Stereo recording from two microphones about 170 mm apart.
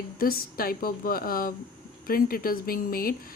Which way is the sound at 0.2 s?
60° left (ahead or behind).